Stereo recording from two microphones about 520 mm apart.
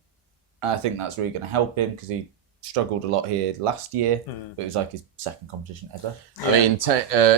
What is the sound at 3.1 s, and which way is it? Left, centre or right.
Speech, right.